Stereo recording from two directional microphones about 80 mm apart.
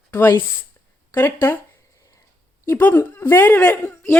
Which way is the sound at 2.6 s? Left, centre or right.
Left.